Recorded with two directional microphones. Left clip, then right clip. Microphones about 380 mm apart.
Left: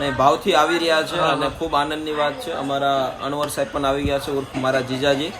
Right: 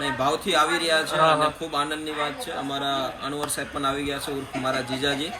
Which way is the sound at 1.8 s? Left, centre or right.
Centre.